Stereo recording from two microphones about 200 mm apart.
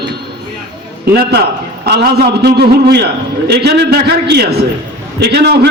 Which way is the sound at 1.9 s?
50° right (ahead or behind).